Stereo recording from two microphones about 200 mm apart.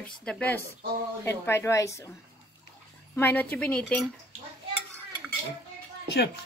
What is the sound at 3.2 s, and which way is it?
Speech, 10° left (ahead or behind).